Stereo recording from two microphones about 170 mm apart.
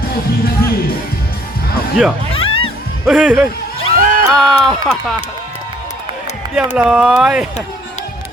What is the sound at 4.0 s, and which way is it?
Music, 55° right (ahead or behind).